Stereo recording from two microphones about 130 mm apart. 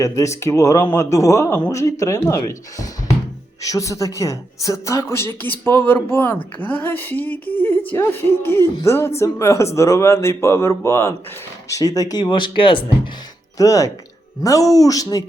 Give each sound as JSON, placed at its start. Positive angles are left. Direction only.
{"t": 0.0, "sound": "a woman's voice", "side_deg": 25}
{"t": 13.6, "sound": "speech", "side_deg": 25}